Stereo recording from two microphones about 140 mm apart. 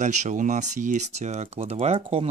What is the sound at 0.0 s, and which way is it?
Speech, 60° right (ahead or behind).